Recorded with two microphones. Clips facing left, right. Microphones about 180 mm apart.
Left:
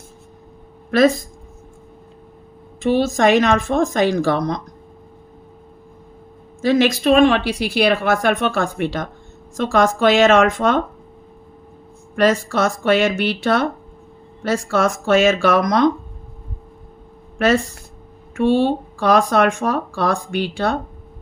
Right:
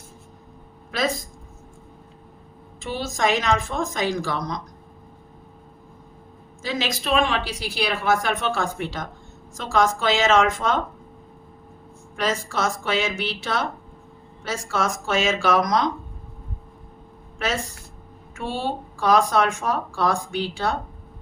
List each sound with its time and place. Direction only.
0.9 s speech: 60° left (ahead or behind)
2.8 s a woman's voice: 60° left (ahead or behind)
6.6 s a woman's voice: 60° left (ahead or behind)
12.1 s a woman's voice: 60° left (ahead or behind)
17.3 s a woman's voice: 60° left (ahead or behind)
18.6 s a woman's voice: 65° left (ahead or behind)